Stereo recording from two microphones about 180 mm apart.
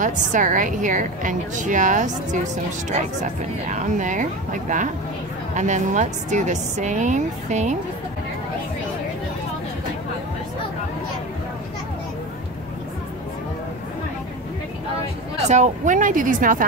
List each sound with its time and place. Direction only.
0.0 s a woman's voice: 45° right (ahead or behind)
3.7 s a woman's voice: 45° right (ahead or behind)
15.4 s a woman's voice: 40° right (ahead or behind)